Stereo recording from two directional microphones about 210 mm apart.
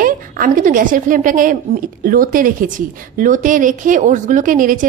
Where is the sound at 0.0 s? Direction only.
40° right (ahead or behind).